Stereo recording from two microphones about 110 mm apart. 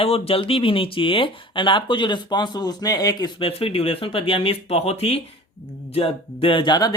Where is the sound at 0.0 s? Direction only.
60° left (ahead or behind).